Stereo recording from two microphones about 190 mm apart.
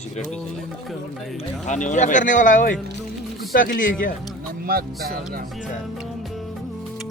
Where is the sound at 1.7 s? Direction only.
40° left (ahead or behind).